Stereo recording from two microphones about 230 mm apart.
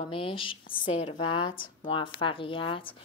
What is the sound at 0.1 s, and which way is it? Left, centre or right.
A woman's voice, left.